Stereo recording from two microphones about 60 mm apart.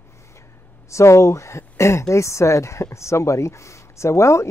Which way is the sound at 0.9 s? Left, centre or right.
Left.